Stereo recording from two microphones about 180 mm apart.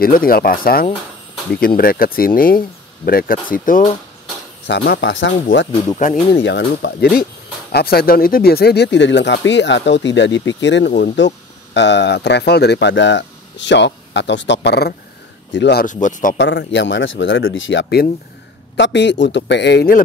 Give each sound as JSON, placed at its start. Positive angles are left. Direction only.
{"t": 0.0, "sound": "speech", "side_deg": 55}
{"t": 4.6, "sound": "speech", "side_deg": 70}
{"t": 5.9, "sound": "speech", "side_deg": 45}
{"t": 6.4, "sound": "speech", "side_deg": 75}
{"t": 15.5, "sound": "speech", "side_deg": 75}
{"t": 15.8, "sound": "speech", "side_deg": 45}
{"t": 16.3, "sound": "speech", "side_deg": 90}